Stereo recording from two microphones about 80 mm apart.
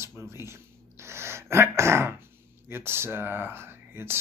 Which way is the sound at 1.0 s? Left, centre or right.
Right.